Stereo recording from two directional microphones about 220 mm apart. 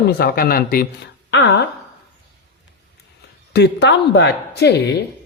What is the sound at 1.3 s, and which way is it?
Speech, 55° left (ahead or behind).